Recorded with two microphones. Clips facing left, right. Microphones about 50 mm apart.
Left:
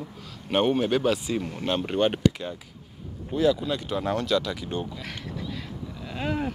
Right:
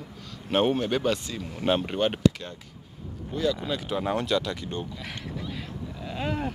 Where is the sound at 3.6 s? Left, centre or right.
Centre.